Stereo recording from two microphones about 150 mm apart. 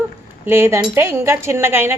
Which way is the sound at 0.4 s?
15° right (ahead or behind).